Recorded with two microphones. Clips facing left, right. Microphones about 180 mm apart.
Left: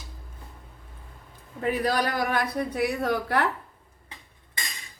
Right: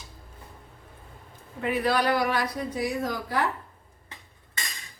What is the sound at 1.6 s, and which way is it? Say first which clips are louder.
Speech: even; 40° left (ahead or behind).